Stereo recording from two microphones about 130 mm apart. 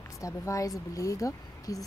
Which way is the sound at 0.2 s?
25° left (ahead or behind).